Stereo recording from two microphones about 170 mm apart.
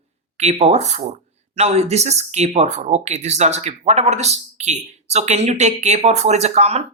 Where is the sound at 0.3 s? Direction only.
40° right (ahead or behind).